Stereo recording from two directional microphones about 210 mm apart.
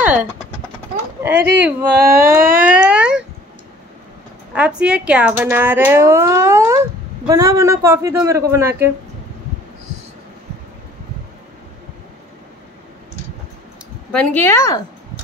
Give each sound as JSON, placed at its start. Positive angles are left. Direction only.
{"t": 1.3, "sound": "speech", "side_deg": -50}
{"t": 1.6, "sound": "speech", "side_deg": -10}
{"t": 2.0, "sound": "speech", "side_deg": -45}
{"t": 2.4, "sound": "a sound", "side_deg": -40}
{"t": 2.8, "sound": "a sound", "side_deg": -5}
{"t": 4.6, "sound": "speech", "side_deg": -5}
{"t": 14.1, "sound": "speech", "side_deg": 10}